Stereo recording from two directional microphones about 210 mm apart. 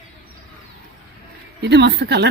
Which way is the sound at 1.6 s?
55° right (ahead or behind).